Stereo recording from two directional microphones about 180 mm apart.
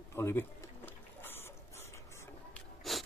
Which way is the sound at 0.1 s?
15° left (ahead or behind).